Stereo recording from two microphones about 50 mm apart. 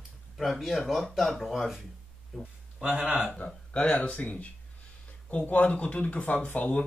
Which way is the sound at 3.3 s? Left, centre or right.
Left.